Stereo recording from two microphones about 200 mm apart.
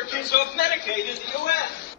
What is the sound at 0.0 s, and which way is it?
A man's voice, 50° left (ahead or behind).